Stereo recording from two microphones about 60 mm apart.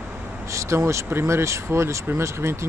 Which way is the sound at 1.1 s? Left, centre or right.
Right.